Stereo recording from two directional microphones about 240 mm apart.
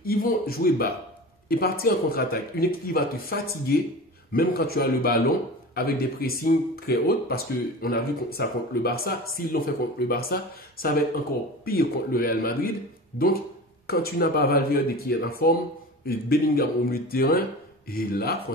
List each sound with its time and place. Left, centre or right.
0.0 s speech: left
13.8 s speech: left